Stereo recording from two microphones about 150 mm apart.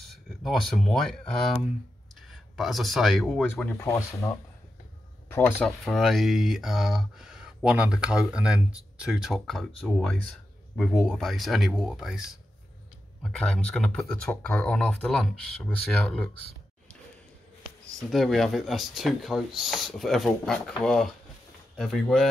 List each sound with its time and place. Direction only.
0.0 s speech: centre (ahead or behind)
3.8 s speech: 20° left (ahead or behind)
5.9 s speech: centre (ahead or behind)
17.9 s speech: centre (ahead or behind)